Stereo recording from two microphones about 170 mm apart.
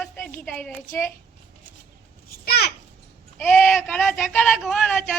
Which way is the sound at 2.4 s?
65° left (ahead or behind).